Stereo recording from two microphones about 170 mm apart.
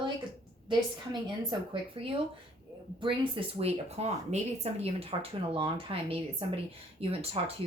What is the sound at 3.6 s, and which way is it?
A woman's voice, 40° right (ahead or behind).